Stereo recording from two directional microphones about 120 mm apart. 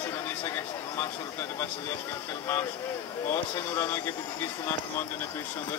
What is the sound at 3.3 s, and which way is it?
Mantra, 20° left (ahead or behind).